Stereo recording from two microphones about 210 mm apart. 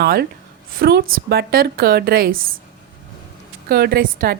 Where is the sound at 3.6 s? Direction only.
50° right (ahead or behind).